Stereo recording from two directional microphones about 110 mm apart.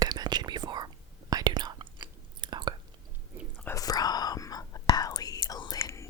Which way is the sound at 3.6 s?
30° left (ahead or behind).